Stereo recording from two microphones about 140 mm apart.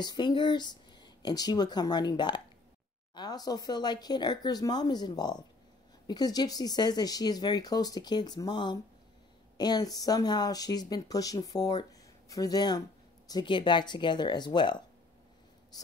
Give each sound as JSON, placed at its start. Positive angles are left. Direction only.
{"t": 0.0, "sound": "speech", "side_deg": 30}